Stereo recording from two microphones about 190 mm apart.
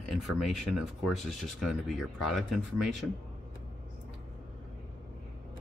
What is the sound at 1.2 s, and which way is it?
Speech, centre (ahead or behind).